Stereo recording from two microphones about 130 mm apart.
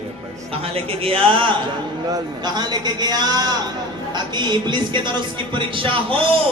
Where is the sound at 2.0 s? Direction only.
30° right (ahead or behind).